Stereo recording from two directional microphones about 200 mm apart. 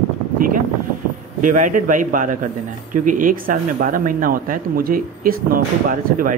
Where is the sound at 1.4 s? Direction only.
40° right (ahead or behind).